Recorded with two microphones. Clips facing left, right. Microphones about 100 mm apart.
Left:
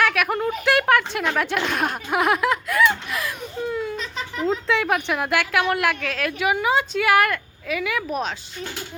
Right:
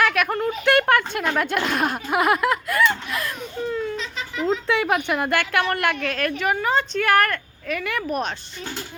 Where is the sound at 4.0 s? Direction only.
45° left (ahead or behind).